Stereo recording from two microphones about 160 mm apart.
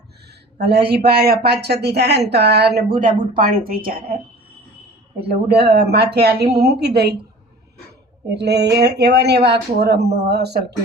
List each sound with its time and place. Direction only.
0.6 s a man's voice: 85° right; by 4.0 s 65° right (ahead or behind)
5.1 s speech: 90° right
8.3 s speech: 90° right